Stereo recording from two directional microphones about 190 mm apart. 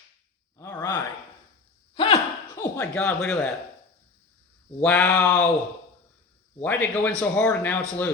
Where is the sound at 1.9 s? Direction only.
25° left (ahead or behind).